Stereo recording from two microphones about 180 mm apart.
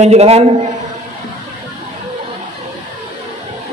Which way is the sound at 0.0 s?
35° right (ahead or behind).